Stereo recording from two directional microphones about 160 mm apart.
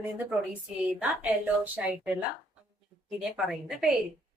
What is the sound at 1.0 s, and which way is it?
A woman's voice, 10° right (ahead or behind).